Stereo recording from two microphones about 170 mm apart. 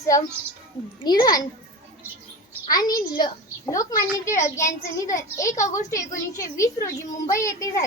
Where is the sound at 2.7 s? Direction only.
20° left (ahead or behind).